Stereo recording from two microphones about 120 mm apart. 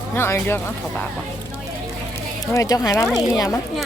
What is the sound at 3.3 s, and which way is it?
Speech, 25° left (ahead or behind).